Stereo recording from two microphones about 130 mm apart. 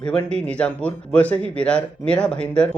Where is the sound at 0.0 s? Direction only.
5° left (ahead or behind).